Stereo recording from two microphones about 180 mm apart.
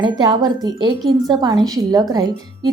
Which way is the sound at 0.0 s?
20° right (ahead or behind).